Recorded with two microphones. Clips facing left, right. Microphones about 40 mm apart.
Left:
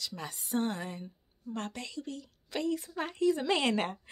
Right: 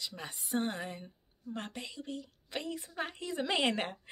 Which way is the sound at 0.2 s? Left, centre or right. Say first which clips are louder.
Left 2 dB; right.